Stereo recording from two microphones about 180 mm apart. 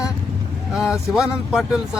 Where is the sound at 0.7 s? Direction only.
Centre (ahead or behind).